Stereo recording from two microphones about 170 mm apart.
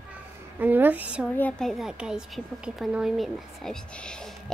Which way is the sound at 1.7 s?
5° right (ahead or behind).